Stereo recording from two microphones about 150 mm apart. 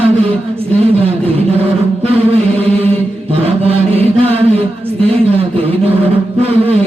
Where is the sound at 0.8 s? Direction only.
40° right (ahead or behind).